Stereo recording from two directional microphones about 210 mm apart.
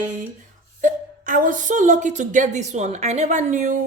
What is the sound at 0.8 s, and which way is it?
Speech, 40° right (ahead or behind).